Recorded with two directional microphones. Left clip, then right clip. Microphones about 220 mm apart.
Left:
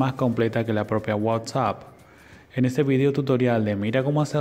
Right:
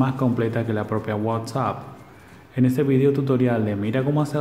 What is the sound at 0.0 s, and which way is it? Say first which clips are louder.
Speech: even; 40° left (ahead or behind).